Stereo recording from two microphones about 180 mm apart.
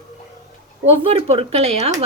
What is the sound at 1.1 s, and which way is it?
Speech, 35° right (ahead or behind).